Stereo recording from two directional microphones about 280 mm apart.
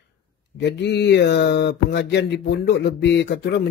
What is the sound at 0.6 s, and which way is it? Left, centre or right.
Speech, left.